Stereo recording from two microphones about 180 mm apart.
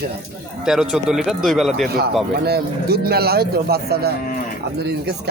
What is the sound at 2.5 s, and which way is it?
A man's voice, 60° right (ahead or behind).